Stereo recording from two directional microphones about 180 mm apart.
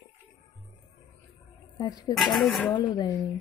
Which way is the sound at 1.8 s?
20° left (ahead or behind).